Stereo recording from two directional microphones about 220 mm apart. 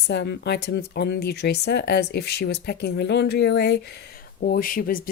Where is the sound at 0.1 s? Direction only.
50° left (ahead or behind).